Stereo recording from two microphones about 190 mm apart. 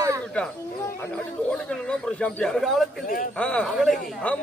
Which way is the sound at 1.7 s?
5° left (ahead or behind).